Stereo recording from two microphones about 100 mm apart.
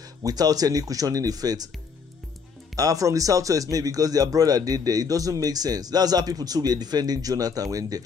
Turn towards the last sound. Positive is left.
turn(degrees=-35)  # may be behind; listen again after turning